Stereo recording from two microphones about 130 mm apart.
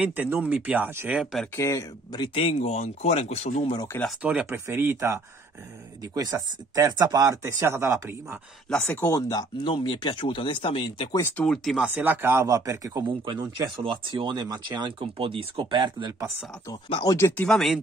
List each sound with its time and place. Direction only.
0.0 s speech: 15° right (ahead or behind)
1.6 s speech: 25° left (ahead or behind); by 3.6 s 55° left (ahead or behind)
4.2 s speech: 10° right (ahead or behind)
8.6 s speech: 5° left (ahead or behind)
9.1 s speech: 30° left (ahead or behind)
11.3 s speech: 5° left (ahead or behind)
11.7 s speech: 10° right (ahead or behind); by 16.3 s 35° right (ahead or behind)
16.9 s speech: 30° left (ahead or behind)
17.4 s speech: 5° left (ahead or behind)